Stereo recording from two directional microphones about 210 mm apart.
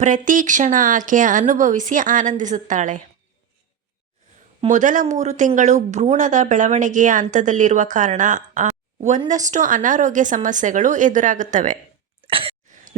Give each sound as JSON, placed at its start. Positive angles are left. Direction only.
{"t": 0.0, "sound": "speech", "side_deg": -40}
{"t": 4.6, "sound": "speech", "side_deg": -35}
{"t": 12.2, "sound": "cough", "side_deg": -25}